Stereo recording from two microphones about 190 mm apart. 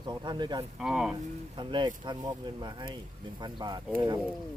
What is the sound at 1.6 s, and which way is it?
Speech, 25° right (ahead or behind).